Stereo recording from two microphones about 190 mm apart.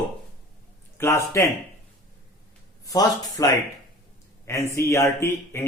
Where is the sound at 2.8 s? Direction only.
20° left (ahead or behind).